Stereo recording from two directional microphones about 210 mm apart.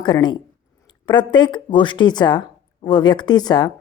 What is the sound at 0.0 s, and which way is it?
A woman's voice, 20° left (ahead or behind).